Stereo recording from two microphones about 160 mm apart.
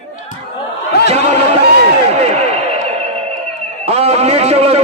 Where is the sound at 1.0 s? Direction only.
40° right (ahead or behind).